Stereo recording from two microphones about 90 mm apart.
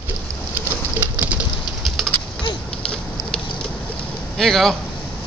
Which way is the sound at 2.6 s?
10° left (ahead or behind).